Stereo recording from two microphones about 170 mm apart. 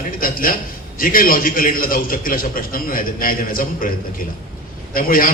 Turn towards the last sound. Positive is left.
turn(degrees=55)  # may be behind; listen again after turning